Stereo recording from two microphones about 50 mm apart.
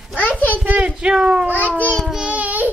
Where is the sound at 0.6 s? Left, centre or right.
Right.